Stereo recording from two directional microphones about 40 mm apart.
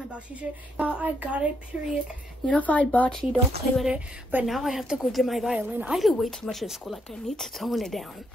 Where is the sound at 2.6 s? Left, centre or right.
Left.